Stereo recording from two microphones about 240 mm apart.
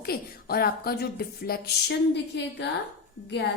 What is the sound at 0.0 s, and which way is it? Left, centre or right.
A woman's voice, left.